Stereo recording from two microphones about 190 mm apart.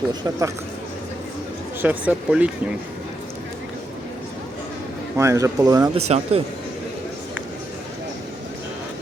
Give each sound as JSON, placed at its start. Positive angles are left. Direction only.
{"t": 0.1, "sound": "speech", "side_deg": -15}
{"t": 1.8, "sound": "speech", "side_deg": -5}
{"t": 5.1, "sound": "speech", "side_deg": -15}
{"t": 6.1, "sound": "speech", "side_deg": -35}